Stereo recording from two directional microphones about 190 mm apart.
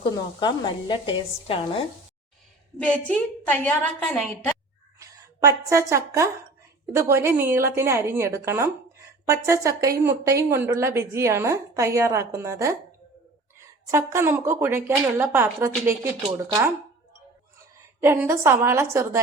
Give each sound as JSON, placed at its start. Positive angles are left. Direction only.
{"t": 0.0, "sound": "a woman's voice", "side_deg": 25}
{"t": 2.7, "sound": "a woman's voice", "side_deg": 5}
{"t": 4.9, "sound": "a woman's voice", "side_deg": -15}
{"t": 13.8, "sound": "a woman's voice", "side_deg": -15}
{"t": 18.0, "sound": "a woman's voice", "side_deg": -15}